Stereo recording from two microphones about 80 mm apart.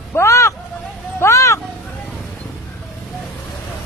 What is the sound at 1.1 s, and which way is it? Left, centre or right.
Vehicle, left.